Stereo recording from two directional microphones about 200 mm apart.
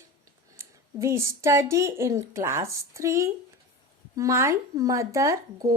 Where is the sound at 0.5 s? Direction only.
15° right (ahead or behind).